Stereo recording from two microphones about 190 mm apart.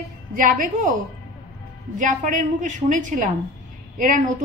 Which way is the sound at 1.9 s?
40° right (ahead or behind).